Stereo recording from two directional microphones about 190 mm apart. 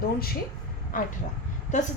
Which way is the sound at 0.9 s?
45° left (ahead or behind).